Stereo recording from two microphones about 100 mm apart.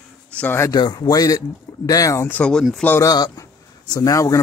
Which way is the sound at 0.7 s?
45° left (ahead or behind).